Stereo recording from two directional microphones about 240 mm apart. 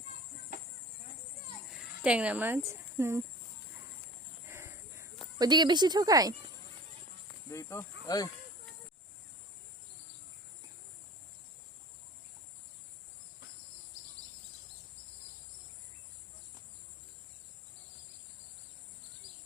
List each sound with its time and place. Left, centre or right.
1.8 s speech: centre
4.4 s a sound: centre
5.4 s a woman's voice: centre
7.5 s speech: centre